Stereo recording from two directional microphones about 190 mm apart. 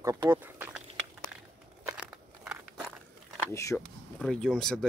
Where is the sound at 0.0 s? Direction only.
15° right (ahead or behind).